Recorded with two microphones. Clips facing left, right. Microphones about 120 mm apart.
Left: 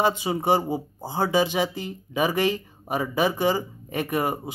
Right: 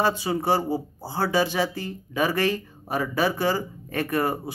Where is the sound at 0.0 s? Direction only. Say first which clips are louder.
Left 1 dB; 15° left (ahead or behind).